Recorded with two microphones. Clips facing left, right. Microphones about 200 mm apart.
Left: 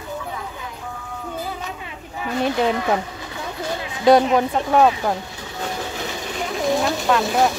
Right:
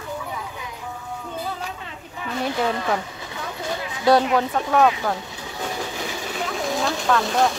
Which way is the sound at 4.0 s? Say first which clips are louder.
Left 3 dB; 20° left (ahead or behind).